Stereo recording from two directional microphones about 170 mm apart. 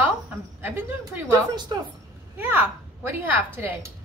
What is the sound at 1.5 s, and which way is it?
Speech, 25° right (ahead or behind).